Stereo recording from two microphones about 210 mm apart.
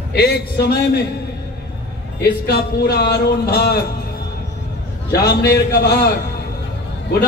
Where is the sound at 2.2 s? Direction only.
50° left (ahead or behind).